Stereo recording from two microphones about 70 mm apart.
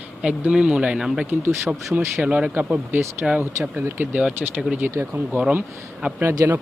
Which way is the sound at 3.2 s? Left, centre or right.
Centre.